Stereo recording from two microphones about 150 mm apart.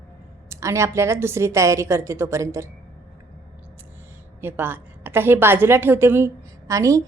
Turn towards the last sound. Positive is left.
turn(degrees=-20)  # may be behind; listen again after turning